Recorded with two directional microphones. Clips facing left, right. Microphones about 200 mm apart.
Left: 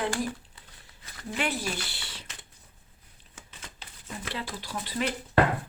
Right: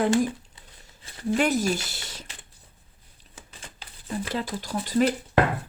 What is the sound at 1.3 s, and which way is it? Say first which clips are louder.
Speech: right 8 dB; 45° right (ahead or behind).